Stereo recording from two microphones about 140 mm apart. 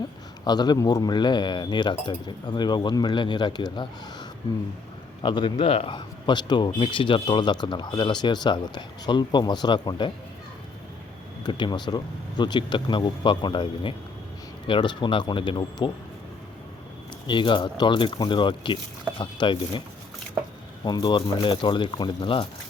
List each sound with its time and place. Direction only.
0.4 s speech: 30° left (ahead or behind)
11.4 s speech: 30° left (ahead or behind)
17.2 s speech: 35° left (ahead or behind)
20.8 s speech: 30° left (ahead or behind)